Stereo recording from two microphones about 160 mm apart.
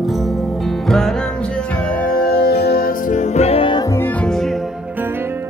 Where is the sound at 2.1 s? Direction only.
70° left (ahead or behind); by 3.8 s 35° left (ahead or behind).